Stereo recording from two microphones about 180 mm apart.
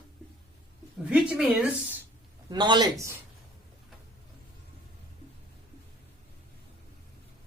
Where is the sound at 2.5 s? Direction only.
25° right (ahead or behind).